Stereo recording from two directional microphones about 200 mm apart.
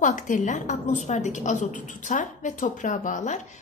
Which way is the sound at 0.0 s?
40° left (ahead or behind).